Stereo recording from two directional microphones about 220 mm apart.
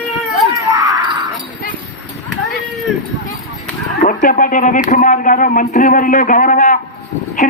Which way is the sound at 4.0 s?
40° left (ahead or behind).